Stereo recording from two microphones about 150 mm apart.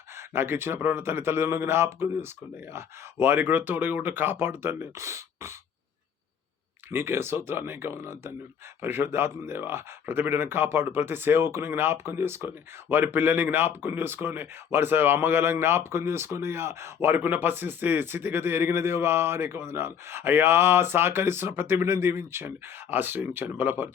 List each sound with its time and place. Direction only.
0.2 s speech: 15° right (ahead or behind)
6.9 s speech: 15° right (ahead or behind)